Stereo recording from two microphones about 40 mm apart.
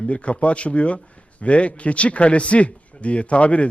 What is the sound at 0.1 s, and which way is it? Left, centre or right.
A man's voice, left.